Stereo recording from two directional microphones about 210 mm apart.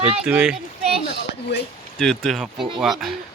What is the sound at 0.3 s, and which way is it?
Speech, 5° right (ahead or behind).